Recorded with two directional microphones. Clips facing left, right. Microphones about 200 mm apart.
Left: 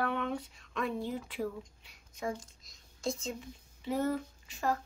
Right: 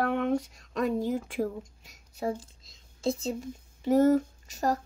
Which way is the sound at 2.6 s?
25° right (ahead or behind).